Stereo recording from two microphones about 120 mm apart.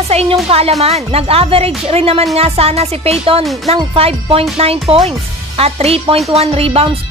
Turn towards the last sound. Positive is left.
turn(degrees=-55)  # may be behind; listen again after turning